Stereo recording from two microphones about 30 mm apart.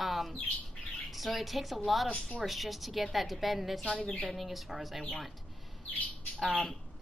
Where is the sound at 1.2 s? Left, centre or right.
Centre.